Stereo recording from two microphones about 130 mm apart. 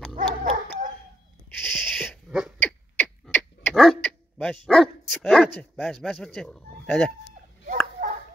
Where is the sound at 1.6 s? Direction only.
5° left (ahead or behind).